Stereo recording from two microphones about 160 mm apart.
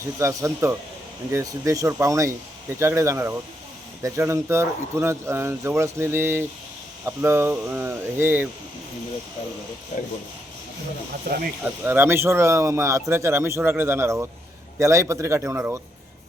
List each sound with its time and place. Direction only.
0.0 s speech: 20° right (ahead or behind)
11.6 s speech: 10° right (ahead or behind)